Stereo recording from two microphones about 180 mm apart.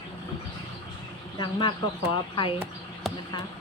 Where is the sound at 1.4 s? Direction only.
25° left (ahead or behind).